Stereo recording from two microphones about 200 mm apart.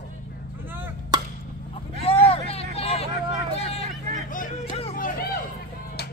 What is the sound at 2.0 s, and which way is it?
Vehicle, 30° left (ahead or behind).